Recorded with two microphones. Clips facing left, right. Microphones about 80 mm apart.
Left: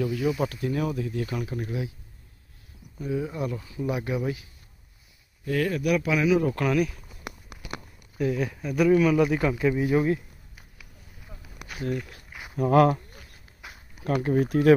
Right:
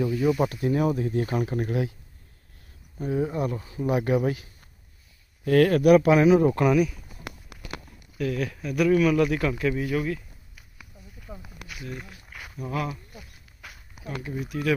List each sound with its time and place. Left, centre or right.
0.2 s speech: centre
0.5 s speech: right
3.0 s speech: right
5.4 s speech: right
5.9 s speech: right
6.5 s speech: centre
8.2 s speech: centre
11.3 s a sound: right
11.7 s a sound: left
12.3 s a sound: centre
12.5 s a sound: left
14.0 s speech: left